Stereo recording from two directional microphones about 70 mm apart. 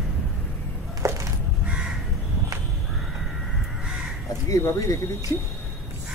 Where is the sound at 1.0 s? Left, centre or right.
Right.